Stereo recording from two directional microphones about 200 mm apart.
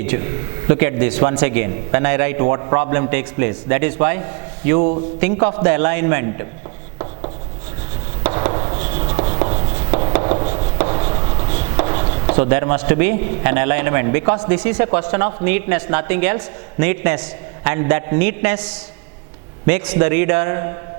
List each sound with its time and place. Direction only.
0.7 s a man's voice: 15° right (ahead or behind)
8.3 s writing: 25° right (ahead or behind)
11.8 s chopping: 20° right (ahead or behind)
12.3 s a man's voice: 15° right (ahead or behind)